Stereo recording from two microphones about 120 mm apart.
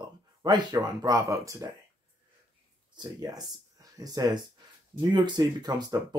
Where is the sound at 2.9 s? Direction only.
35° right (ahead or behind).